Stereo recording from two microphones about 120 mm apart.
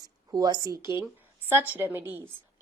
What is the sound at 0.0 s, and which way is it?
Speech, 35° right (ahead or behind).